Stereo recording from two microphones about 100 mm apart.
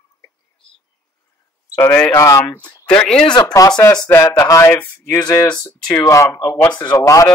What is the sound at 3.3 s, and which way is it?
Speech, 45° left (ahead or behind).